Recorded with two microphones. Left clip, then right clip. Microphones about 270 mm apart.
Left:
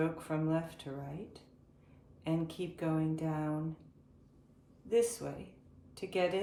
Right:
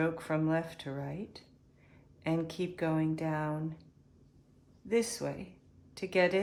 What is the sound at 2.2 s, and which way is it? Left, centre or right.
Speech, right.